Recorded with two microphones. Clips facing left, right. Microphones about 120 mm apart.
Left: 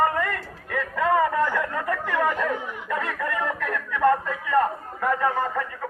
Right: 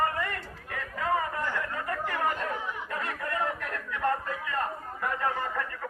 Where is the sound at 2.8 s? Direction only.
90° left.